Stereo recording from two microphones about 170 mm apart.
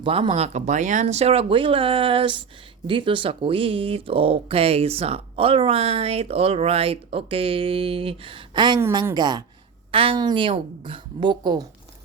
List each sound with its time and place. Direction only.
0.0 s a woman's voice: 30° right (ahead or behind)